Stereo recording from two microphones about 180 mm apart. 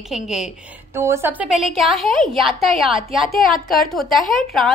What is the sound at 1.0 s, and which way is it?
A woman's voice, 15° right (ahead or behind).